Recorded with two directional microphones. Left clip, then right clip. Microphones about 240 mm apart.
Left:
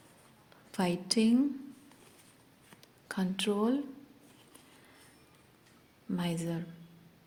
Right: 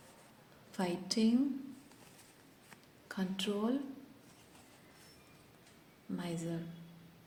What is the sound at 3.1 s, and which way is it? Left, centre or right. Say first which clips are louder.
Speech: left 5 dB; left.